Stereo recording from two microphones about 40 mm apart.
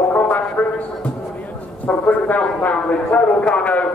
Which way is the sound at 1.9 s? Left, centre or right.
Left.